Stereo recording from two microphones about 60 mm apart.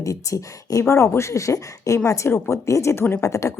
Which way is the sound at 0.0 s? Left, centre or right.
Left.